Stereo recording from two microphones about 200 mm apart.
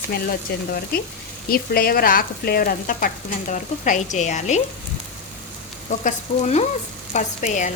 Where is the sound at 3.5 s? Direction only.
40° left (ahead or behind).